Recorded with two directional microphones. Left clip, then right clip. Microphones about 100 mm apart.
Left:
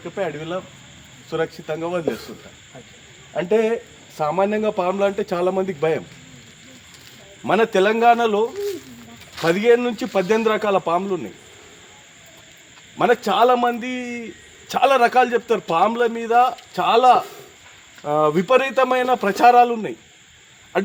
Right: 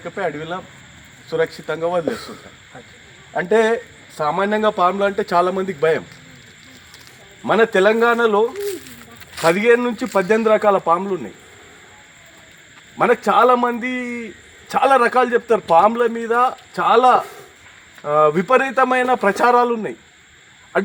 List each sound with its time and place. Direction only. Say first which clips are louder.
0.0 s speech: right 2 dB; 15° right (ahead or behind)
4.2 s a man's voice: right 2 dB; 5° right (ahead or behind)
7.4 s a man's voice: right 3 dB; 5° left (ahead or behind)
9.5 s a man's voice: right 2 dB; 15° left (ahead or behind)
13.0 s a man's voice: right 2 dB; 15° left (ahead or behind)